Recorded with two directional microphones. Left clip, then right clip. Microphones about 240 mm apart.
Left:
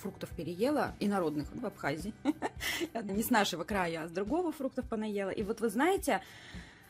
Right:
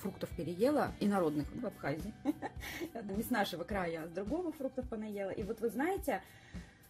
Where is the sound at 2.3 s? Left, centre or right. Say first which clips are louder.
Left 6 dB; left.